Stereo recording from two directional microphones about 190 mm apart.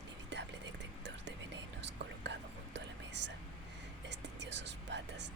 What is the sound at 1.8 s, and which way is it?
Whispering, 65° right (ahead or behind).